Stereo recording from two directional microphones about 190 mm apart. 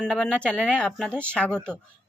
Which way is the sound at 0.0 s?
5° left (ahead or behind).